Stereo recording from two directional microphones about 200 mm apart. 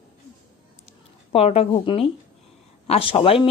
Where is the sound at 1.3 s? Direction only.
30° left (ahead or behind).